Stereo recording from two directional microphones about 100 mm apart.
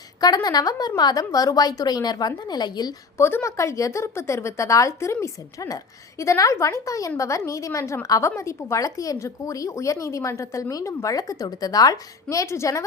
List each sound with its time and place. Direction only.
0.2 s a woman's voice: 40° left (ahead or behind)
3.2 s a woman's voice: 25° left (ahead or behind)